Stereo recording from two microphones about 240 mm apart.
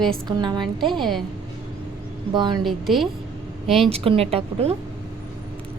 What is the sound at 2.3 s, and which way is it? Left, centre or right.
Speech, centre.